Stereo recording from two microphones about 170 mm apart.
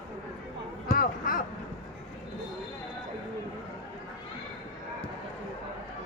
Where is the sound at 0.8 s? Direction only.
55° left (ahead or behind).